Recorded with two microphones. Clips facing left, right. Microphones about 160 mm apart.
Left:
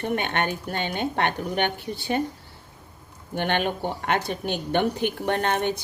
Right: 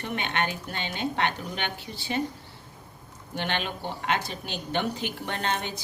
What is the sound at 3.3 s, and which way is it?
A woman's voice, 50° left (ahead or behind).